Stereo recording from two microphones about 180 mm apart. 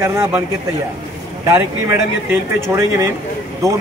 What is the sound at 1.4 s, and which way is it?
Speech, 15° right (ahead or behind).